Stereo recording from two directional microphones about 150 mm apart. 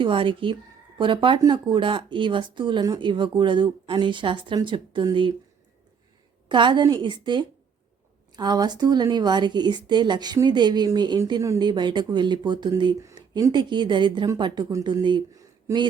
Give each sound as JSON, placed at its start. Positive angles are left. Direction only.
{"t": 0.0, "sound": "speech", "side_deg": -35}
{"t": 6.5, "sound": "a woman's voice", "side_deg": -30}